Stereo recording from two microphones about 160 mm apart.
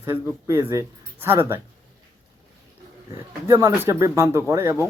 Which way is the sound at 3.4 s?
20° right (ahead or behind).